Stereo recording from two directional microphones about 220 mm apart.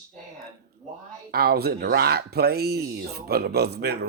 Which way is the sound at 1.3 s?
45° right (ahead or behind).